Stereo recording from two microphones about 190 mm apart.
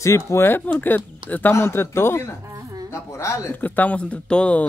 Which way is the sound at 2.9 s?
15° left (ahead or behind).